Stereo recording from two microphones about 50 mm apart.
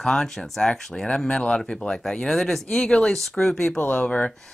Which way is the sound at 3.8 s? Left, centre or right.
Left.